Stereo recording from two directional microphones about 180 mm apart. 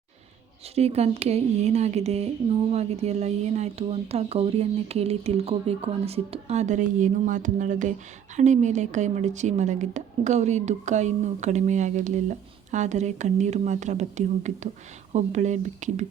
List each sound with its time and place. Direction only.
0.8 s speech: 35° right (ahead or behind)